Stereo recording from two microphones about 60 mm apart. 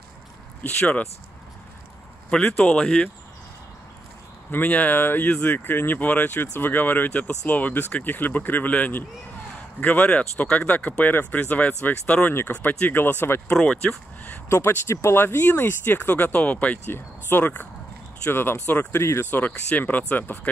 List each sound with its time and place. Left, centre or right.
0.7 s speech: centre
2.3 s speech: centre
4.5 s speech: left
5.3 s speech: left
13.6 s speech: centre
14.9 s speech: left